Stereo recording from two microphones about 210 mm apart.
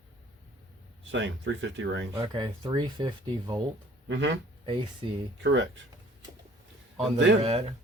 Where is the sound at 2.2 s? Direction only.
20° right (ahead or behind).